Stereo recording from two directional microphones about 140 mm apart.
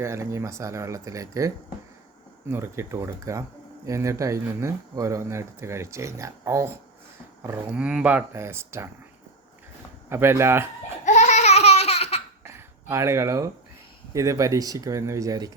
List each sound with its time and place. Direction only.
0.0 s speech: 20° right (ahead or behind)
10.1 s speech: 15° right (ahead or behind)
11.0 s laughter: 60° left (ahead or behind)
12.4 s a sound: 20° right (ahead or behind)
14.1 s speech: 20° right (ahead or behind)